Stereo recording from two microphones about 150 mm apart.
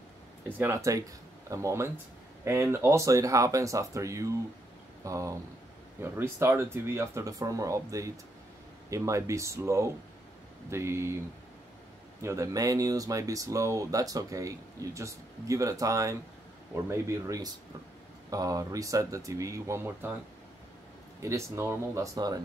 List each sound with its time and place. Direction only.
0.5 s speech: 15° right (ahead or behind)
12.2 s speech: 20° right (ahead or behind)
21.2 s speech: 20° right (ahead or behind)